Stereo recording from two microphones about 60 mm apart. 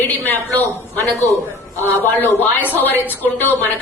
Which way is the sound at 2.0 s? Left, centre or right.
Left.